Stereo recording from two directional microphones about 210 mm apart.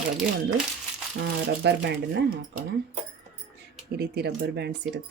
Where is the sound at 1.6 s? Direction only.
55° right (ahead or behind).